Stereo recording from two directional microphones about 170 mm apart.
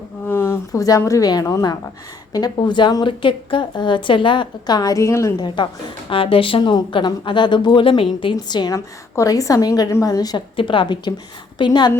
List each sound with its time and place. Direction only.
0.3 s a woman's voice: 15° left (ahead or behind)